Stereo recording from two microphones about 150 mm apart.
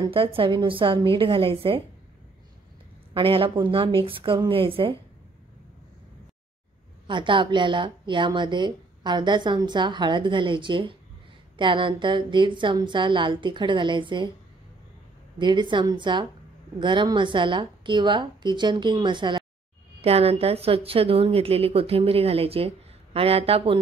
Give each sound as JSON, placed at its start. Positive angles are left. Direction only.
{"t": 0.0, "sound": "a woman's voice", "side_deg": -35}
{"t": 3.2, "sound": "a woman's voice", "side_deg": -35}
{"t": 7.1, "sound": "a woman's voice", "side_deg": -35}
{"t": 15.3, "sound": "a woman's voice", "side_deg": -30}
{"t": 20.0, "sound": "a woman's voice", "side_deg": -40}